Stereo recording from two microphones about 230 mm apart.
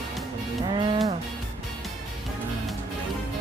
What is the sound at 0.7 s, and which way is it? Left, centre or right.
Music, right.